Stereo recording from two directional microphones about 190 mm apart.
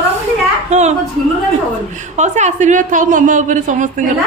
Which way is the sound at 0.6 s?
35° right (ahead or behind).